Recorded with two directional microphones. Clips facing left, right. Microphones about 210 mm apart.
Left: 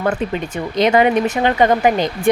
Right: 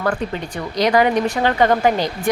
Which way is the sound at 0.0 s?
20° left (ahead or behind).